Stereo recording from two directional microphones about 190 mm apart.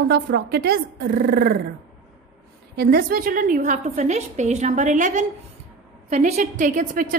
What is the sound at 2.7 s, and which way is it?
A woman's voice, 55° right (ahead or behind).